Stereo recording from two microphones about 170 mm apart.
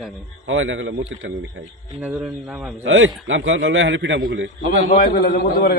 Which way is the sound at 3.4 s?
90° right.